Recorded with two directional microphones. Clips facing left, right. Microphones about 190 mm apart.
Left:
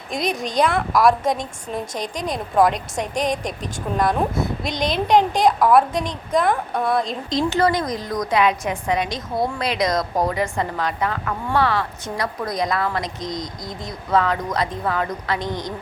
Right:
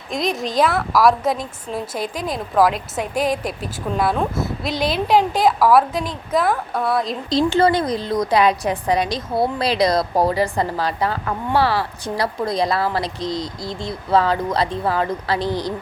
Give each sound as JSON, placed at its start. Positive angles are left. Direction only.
{"t": 0.1, "sound": "a woman's voice", "side_deg": 0}
{"t": 7.3, "sound": "a woman's voice", "side_deg": -30}